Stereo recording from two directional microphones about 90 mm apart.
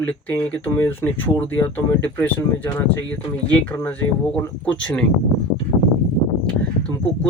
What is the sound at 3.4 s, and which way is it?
Speech, 15° left (ahead or behind).